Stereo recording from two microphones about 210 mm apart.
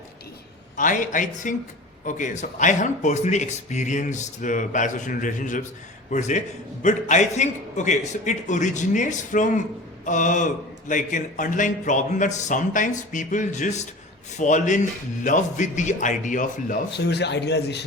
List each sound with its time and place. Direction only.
0.8 s a man's voice: 40° left (ahead or behind)